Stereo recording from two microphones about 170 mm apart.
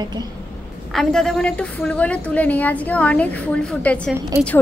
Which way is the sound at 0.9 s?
5° left (ahead or behind).